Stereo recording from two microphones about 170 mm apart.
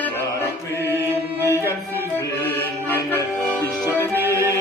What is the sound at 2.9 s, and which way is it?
Music, 15° left (ahead or behind).